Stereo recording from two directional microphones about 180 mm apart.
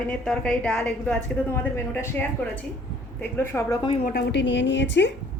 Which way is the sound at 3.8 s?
30° left (ahead or behind).